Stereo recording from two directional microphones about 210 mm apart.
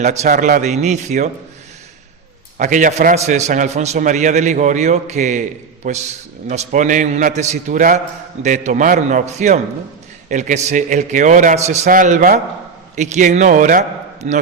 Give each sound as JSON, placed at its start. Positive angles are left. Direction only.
{"t": 0.0, "sound": "a man's voice", "side_deg": -35}
{"t": 2.6, "sound": "a man's voice", "side_deg": -40}